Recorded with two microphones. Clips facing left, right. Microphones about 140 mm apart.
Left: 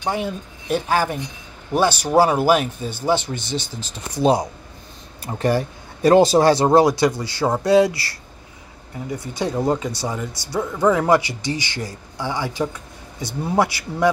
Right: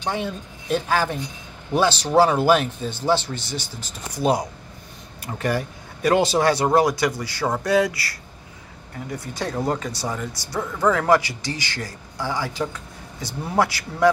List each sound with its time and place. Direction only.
0.0 s speech: 10° left (ahead or behind); by 8.2 s 30° left (ahead or behind)
9.7 s speech: 15° left (ahead or behind)